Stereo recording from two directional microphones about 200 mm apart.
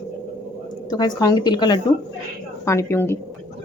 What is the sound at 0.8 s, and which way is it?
A woman's voice, 20° left (ahead or behind).